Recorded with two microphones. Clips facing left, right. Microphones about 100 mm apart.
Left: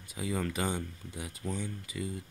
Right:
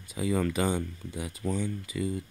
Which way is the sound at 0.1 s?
90° right.